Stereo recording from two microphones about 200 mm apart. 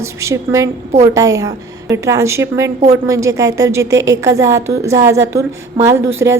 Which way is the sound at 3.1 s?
15° right (ahead or behind).